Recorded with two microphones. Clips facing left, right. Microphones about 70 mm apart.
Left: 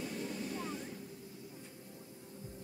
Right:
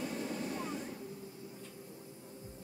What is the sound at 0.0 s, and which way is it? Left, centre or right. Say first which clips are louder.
Waves: right 2 dB; centre.